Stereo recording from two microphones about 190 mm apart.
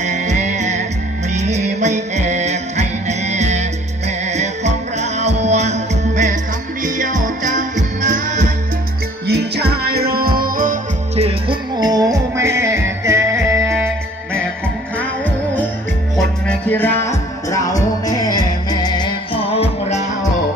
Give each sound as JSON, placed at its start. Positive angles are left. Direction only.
{"t": 0.0, "sound": "music", "side_deg": -40}
{"t": 9.3, "sound": "music", "side_deg": -60}
{"t": 11.1, "sound": "music", "side_deg": -30}
{"t": 16.2, "sound": "music", "side_deg": 5}